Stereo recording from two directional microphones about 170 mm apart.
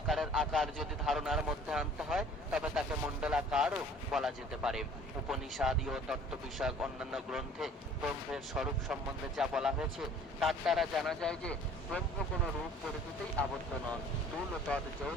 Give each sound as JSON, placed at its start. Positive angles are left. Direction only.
{"t": 0.1, "sound": "speech", "side_deg": 0}
{"t": 13.4, "sound": "speech", "side_deg": 10}
{"t": 14.7, "sound": "speech", "side_deg": 5}